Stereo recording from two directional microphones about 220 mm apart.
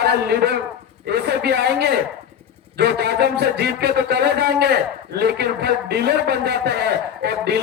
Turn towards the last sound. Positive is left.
turn(degrees=-50)  # may be behind; listen again after turning